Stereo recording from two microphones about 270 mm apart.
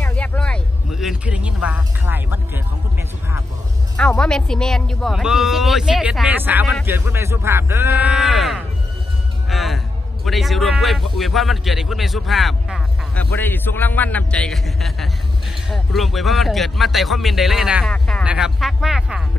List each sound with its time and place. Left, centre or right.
0.0 s speech: centre
3.9 s a man's voice: centre